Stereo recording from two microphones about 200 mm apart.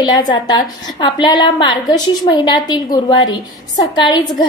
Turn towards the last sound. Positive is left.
turn(degrees=20)  # may be behind; listen again after turning